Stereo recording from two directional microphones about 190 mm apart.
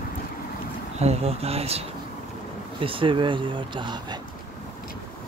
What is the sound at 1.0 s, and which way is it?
Speech, 35° right (ahead or behind).